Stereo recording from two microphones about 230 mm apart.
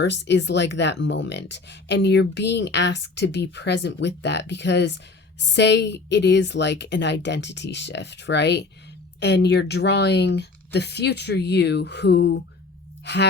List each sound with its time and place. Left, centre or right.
0.0 s speech: left